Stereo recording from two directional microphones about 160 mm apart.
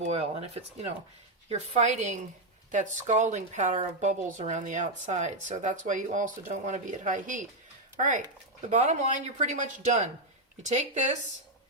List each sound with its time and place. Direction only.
0.0 s a woman's voice: 45° right (ahead or behind)